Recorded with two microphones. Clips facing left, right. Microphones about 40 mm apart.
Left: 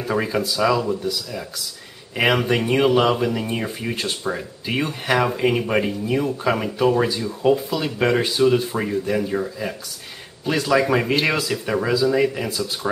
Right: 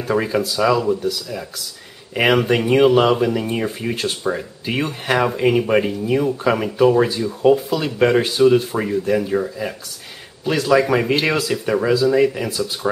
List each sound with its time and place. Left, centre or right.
0.0 s speech: centre
2.1 s speech: centre